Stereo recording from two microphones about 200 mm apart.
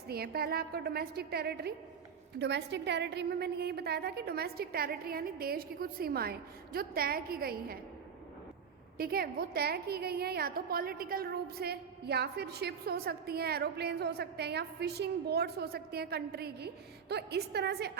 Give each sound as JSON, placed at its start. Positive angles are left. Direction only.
{"t": 0.1, "sound": "a woman's voice", "side_deg": -50}
{"t": 9.0, "sound": "a woman's voice", "side_deg": -50}